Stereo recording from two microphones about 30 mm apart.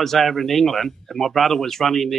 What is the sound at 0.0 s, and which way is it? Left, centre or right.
Speech, centre.